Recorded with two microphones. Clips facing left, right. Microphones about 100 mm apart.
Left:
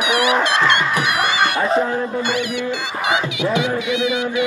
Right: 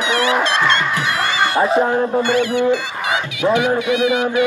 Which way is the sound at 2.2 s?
15° left (ahead or behind).